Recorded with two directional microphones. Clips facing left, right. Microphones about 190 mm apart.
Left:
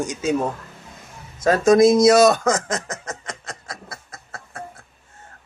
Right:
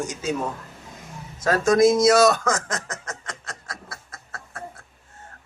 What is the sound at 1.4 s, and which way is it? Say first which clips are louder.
Snicker: left 3 dB; 20° left (ahead or behind).